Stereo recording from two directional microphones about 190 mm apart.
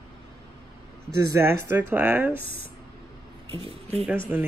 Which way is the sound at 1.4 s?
15° right (ahead or behind).